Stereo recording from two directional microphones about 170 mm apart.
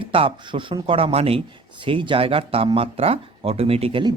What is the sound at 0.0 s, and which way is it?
Speech, 30° right (ahead or behind).